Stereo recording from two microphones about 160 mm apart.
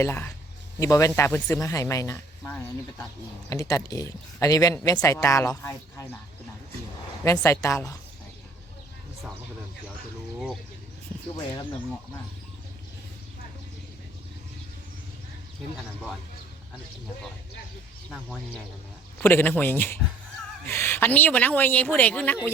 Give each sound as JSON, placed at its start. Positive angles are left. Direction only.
{"t": 0.0, "sound": "speech", "side_deg": 15}
{"t": 7.3, "sound": "speech", "side_deg": 20}
{"t": 19.2, "sound": "speech", "side_deg": 10}